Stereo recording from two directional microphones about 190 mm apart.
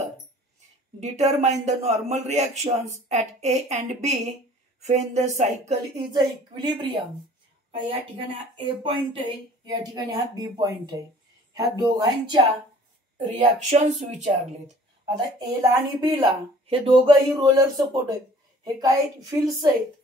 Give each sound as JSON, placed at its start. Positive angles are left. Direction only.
{"t": 1.0, "sound": "a man's voice", "side_deg": -35}
{"t": 6.1, "sound": "a woman's voice", "side_deg": -25}
{"t": 8.6, "sound": "a woman's voice", "side_deg": -25}
{"t": 13.4, "sound": "a man's voice", "side_deg": -35}
{"t": 15.0, "sound": "a woman's voice", "side_deg": -20}